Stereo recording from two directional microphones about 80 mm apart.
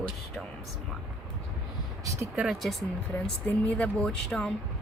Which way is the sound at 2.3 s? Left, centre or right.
Centre.